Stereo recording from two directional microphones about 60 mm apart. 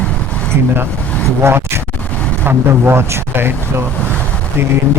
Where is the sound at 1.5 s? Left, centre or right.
Right.